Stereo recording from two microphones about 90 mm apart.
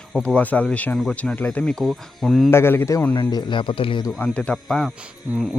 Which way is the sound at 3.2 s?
55° left (ahead or behind).